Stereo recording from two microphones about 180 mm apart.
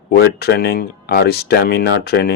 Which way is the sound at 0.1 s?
60° left (ahead or behind).